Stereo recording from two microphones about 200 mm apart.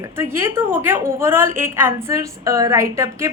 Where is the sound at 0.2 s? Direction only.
10° right (ahead or behind).